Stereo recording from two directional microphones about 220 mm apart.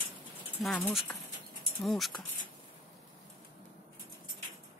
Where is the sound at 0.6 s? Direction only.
Centre (ahead or behind).